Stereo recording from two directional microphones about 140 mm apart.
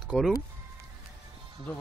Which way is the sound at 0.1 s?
Centre (ahead or behind).